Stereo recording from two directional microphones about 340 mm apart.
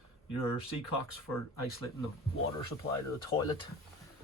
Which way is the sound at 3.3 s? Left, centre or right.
Centre.